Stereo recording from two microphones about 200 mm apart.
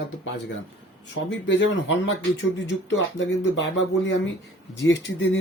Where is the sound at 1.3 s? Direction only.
65° left (ahead or behind).